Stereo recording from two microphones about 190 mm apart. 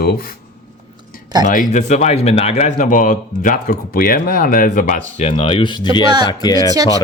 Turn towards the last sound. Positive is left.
turn(degrees=20)  # may be behind; listen again after turning